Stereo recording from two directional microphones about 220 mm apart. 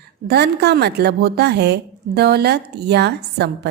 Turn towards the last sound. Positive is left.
turn(degrees=-50)  # may be behind; listen again after turning